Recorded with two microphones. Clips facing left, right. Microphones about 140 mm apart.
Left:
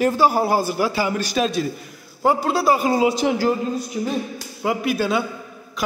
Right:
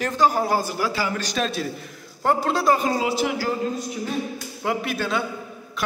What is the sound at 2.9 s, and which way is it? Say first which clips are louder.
Speech: left 5 dB; 20° left (ahead or behind).